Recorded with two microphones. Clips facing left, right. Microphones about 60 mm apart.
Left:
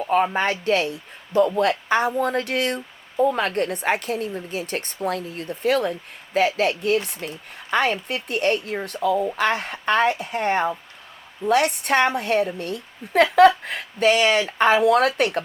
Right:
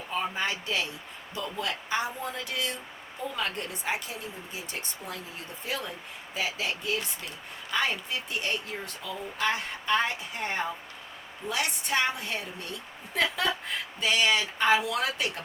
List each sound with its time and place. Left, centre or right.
0.1 s speech: left